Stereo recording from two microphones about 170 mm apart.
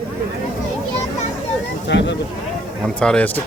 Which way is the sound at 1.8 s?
90° left.